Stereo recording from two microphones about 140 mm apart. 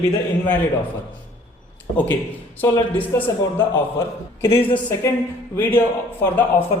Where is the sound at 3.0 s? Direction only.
10° left (ahead or behind).